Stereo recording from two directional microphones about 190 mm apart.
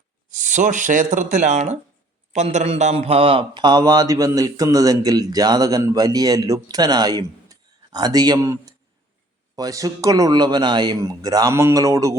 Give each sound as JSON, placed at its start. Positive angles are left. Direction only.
{"t": 0.3, "sound": "a man's voice", "side_deg": -40}